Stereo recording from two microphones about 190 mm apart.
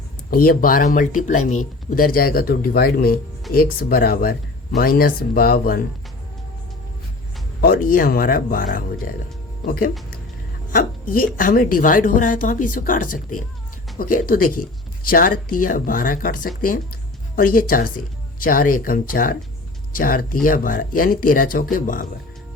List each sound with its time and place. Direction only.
0.3 s speech: 50° left (ahead or behind)
7.6 s speech: 50° left (ahead or behind)